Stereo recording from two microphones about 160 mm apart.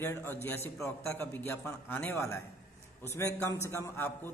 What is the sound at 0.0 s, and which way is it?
A man's voice, 15° left (ahead or behind).